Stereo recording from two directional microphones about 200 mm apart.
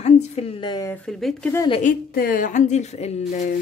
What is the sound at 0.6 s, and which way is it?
Speech, 20° left (ahead or behind).